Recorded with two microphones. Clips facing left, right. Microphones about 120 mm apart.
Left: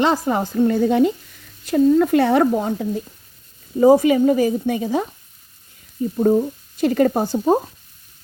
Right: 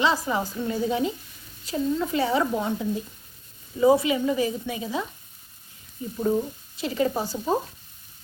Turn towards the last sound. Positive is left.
turn(degrees=50)  # may be behind; listen again after turning